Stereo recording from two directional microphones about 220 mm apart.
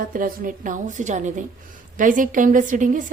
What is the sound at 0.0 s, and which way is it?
A woman's voice, 40° right (ahead or behind).